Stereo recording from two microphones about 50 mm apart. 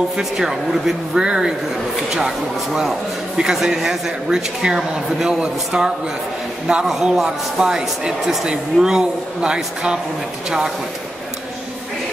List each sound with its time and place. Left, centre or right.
0.2 s speech: centre
6.9 s speech: centre